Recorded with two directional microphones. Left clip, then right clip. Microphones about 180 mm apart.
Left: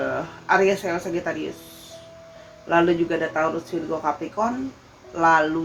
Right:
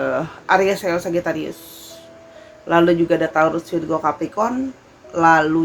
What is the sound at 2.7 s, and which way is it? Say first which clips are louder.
Speech: right 5 dB; 60° right (ahead or behind).